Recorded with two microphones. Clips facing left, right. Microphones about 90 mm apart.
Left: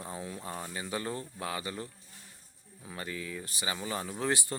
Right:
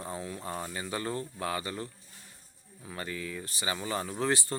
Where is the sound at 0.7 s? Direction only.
5° left (ahead or behind).